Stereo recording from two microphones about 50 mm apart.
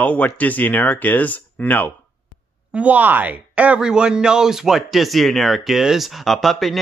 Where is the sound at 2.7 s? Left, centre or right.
Right.